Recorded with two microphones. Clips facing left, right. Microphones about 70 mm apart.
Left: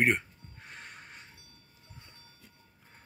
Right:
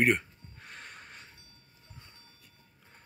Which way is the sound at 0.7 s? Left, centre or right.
Centre.